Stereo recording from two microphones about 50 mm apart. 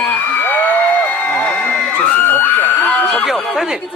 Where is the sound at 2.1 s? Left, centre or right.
Left.